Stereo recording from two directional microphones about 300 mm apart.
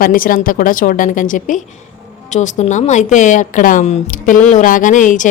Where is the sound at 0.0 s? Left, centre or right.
Left.